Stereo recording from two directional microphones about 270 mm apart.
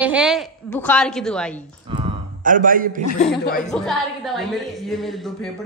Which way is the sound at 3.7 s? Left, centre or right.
Centre.